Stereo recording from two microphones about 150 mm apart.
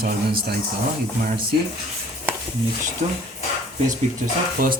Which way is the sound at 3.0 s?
50° right (ahead or behind).